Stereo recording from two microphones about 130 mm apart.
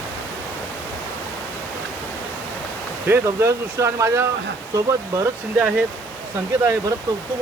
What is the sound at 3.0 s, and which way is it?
Speech, 20° right (ahead or behind).